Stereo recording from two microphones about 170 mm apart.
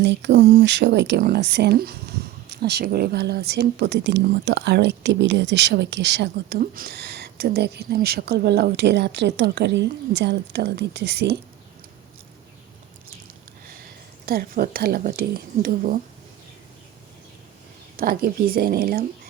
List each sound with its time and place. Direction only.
0.0 s speech: 90° right
6.6 s speech: 60° right (ahead or behind); by 11.3 s 75° right (ahead or behind)
14.3 s speech: 60° right (ahead or behind)
17.9 s speech: 60° right (ahead or behind)